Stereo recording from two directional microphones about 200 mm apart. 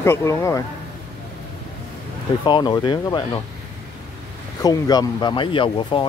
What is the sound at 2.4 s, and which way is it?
Speech, 20° left (ahead or behind).